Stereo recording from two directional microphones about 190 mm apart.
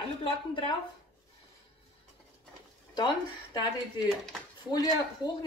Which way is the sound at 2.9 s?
25° left (ahead or behind).